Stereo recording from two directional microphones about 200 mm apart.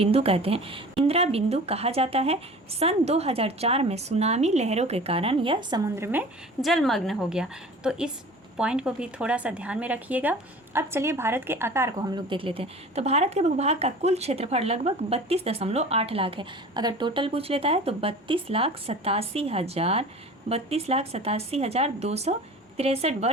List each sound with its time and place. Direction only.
0.0 s a woman's voice: 30° right (ahead or behind)